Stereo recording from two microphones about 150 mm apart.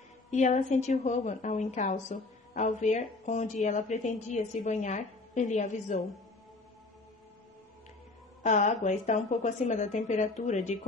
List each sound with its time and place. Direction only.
0.3 s a woman's voice: 55° left (ahead or behind)
8.4 s a woman's voice: 55° left (ahead or behind)